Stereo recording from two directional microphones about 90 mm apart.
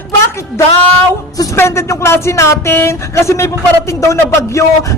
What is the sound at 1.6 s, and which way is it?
Speech, 30° left (ahead or behind).